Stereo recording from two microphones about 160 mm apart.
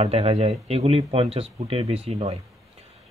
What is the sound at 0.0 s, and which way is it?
Speech, 40° right (ahead or behind).